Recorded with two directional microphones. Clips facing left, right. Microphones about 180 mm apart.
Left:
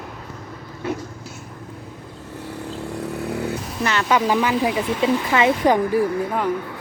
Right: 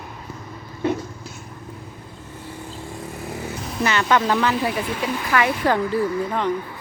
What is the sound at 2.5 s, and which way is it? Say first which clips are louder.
Vehicle: left 6 dB; 65° left (ahead or behind).